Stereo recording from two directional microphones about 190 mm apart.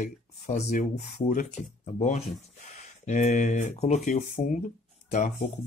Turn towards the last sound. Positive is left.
turn(degrees=35)  # may be behind; listen again after turning